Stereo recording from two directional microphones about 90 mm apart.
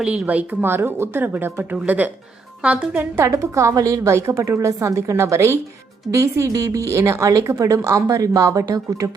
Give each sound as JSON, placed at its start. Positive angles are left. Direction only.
{"t": 0.0, "sound": "a woman's voice", "side_deg": -15}
{"t": 3.0, "sound": "speech", "side_deg": -30}